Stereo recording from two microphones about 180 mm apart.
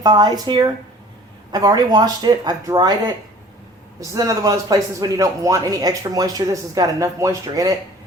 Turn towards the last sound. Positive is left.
turn(degrees=-20)  # may be behind; listen again after turning